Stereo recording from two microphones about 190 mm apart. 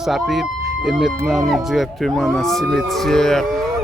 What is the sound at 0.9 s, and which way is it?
Speech, centre (ahead or behind).